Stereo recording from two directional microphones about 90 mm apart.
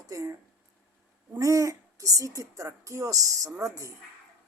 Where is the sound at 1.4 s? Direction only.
35° right (ahead or behind).